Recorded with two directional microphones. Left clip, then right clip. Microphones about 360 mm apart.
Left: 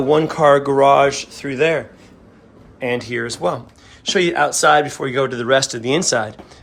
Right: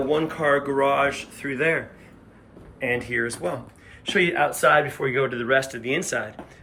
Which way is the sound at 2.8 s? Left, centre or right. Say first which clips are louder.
Left 3 dB; centre.